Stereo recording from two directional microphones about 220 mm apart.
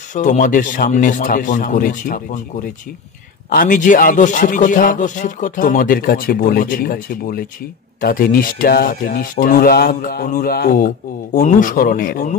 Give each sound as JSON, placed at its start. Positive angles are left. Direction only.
{"t": 0.1, "sound": "a man's voice", "side_deg": 35}